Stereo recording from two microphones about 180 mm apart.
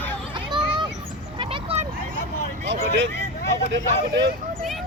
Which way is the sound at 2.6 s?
80° right.